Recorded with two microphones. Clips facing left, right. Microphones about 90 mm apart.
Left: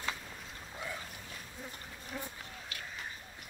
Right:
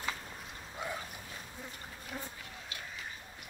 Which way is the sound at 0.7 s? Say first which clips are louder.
Right 3 dB; 25° right (ahead or behind).